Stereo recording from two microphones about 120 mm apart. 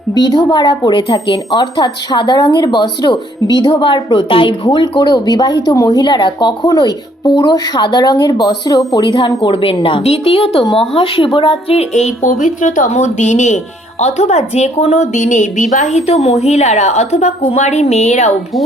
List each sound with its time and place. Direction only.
0.1 s a woman's voice: 35° left (ahead or behind); by 18.3 s 70° left (ahead or behind)